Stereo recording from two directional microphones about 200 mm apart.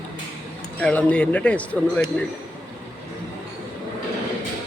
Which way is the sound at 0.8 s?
5° left (ahead or behind).